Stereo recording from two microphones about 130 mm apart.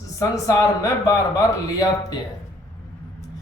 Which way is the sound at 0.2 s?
25° left (ahead or behind).